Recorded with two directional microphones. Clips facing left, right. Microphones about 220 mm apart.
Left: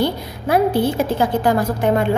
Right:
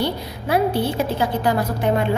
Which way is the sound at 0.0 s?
50° left (ahead or behind).